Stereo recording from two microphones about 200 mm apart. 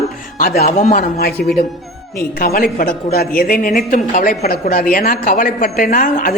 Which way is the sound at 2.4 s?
45° left (ahead or behind).